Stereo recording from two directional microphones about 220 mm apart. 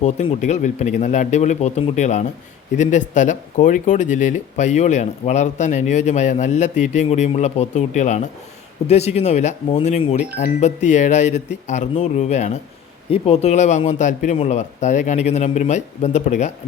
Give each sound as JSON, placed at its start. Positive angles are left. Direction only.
{"t": 0.0, "sound": "speech", "side_deg": 30}